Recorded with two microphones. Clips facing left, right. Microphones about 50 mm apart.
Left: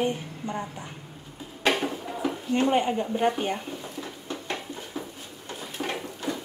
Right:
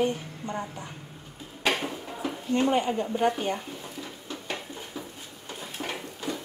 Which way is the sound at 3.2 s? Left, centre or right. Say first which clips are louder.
Even; centre.